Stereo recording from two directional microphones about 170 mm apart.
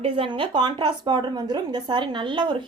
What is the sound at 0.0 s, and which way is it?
Speech, 30° right (ahead or behind).